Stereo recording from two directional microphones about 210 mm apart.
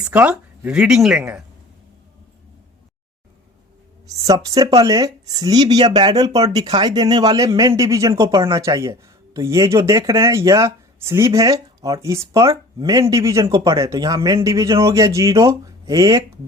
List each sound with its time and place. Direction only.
0.0 s speech: 5° right (ahead or behind)
4.3 s speech: 15° right (ahead or behind)